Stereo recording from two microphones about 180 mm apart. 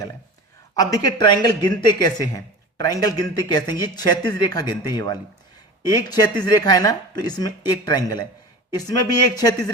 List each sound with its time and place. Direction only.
0.7 s speech: 20° left (ahead or behind)